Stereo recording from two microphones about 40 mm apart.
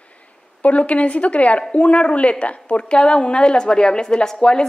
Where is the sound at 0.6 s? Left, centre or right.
Left.